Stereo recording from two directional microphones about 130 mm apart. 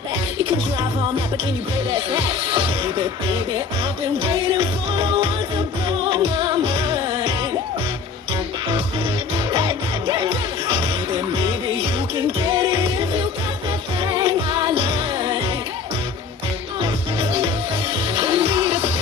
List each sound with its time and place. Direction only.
2.1 s music: 40° right (ahead or behind)
9.5 s music: 40° right (ahead or behind)
12.2 s music: 35° right (ahead or behind)
14.0 s music: 35° right (ahead or behind)
16.8 s music: 35° right (ahead or behind)